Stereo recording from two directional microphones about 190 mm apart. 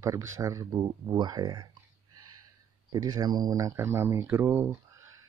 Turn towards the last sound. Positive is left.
turn(degrees=-10)  # may be behind; listen again after turning